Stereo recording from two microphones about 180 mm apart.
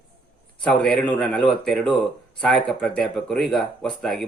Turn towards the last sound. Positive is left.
turn(degrees=0)  # may be behind; listen again after turning